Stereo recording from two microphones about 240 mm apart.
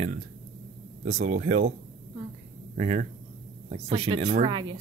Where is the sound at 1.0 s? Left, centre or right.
Right.